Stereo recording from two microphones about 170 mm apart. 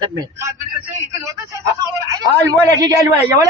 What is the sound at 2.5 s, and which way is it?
Speech, 20° right (ahead or behind).